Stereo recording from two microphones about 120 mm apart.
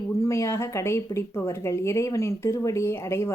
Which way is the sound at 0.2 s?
25° left (ahead or behind).